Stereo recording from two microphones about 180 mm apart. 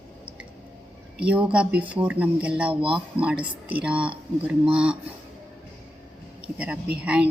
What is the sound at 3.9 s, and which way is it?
Speech, 30° right (ahead or behind).